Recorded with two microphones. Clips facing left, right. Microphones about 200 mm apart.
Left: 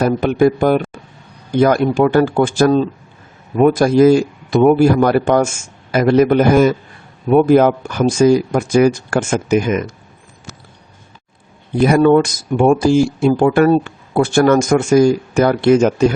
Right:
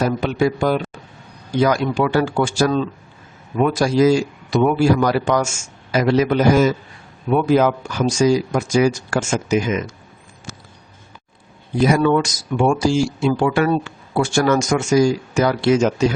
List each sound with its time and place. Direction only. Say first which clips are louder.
0.0 s a man's voice: left 5 dB; 55° left (ahead or behind)
11.8 s speech: left 5 dB; 50° left (ahead or behind)